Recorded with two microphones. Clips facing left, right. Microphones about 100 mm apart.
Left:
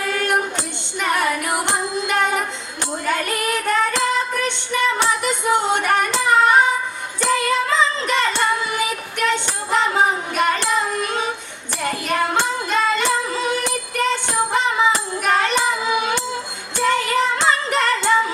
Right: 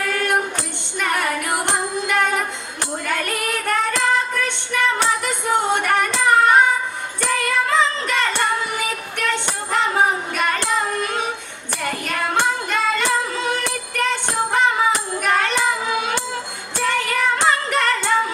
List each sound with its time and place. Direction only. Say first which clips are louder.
0.0 s music: even; 20° left (ahead or behind)
0.9 s a sound: left 2 dB; 20° left (ahead or behind)
1.5 s music: even; 20° left (ahead or behind)